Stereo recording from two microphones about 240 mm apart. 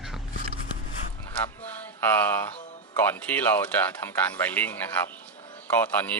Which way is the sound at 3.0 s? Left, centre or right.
Centre.